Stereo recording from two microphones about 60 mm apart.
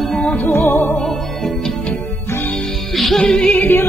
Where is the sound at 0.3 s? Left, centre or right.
Left.